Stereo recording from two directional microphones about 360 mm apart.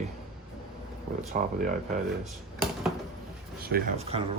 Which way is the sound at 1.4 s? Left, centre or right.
Right.